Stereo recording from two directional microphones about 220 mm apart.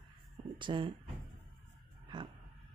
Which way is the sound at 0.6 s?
20° right (ahead or behind).